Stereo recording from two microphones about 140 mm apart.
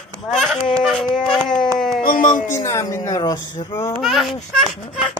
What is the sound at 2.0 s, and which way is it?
Speech, 75° left (ahead or behind).